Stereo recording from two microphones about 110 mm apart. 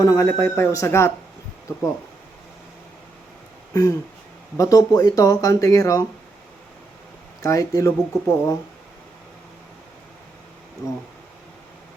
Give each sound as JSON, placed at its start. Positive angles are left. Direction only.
{"t": 0.0, "sound": "speech", "side_deg": 30}
{"t": 3.7, "sound": "speech", "side_deg": 35}
{"t": 7.4, "sound": "speech", "side_deg": 30}